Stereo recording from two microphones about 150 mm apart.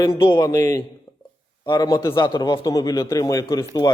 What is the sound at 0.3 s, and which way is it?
Speech, 25° left (ahead or behind).